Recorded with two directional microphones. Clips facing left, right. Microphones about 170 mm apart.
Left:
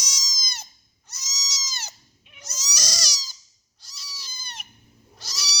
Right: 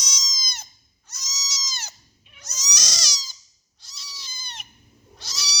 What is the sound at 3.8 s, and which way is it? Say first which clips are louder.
Cat: even; 10° left (ahead or behind).